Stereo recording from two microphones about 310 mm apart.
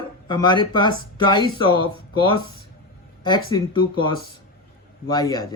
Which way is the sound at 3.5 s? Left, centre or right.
Centre.